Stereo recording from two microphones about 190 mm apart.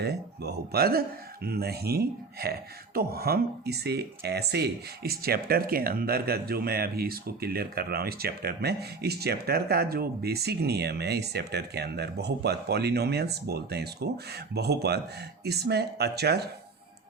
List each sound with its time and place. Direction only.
0.0 s speech: 60° right (ahead or behind)